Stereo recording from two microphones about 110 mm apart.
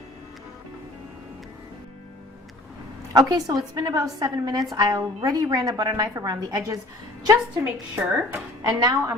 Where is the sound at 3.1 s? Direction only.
35° right (ahead or behind).